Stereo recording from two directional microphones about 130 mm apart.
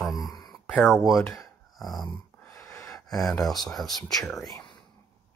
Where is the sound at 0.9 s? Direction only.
Centre (ahead or behind).